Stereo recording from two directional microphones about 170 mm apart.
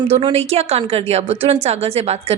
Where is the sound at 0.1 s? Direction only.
35° right (ahead or behind).